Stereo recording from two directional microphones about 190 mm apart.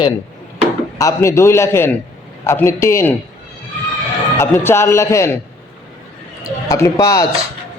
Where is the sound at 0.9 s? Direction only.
15° left (ahead or behind).